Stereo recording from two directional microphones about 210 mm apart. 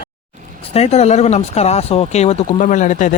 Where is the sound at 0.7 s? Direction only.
30° left (ahead or behind).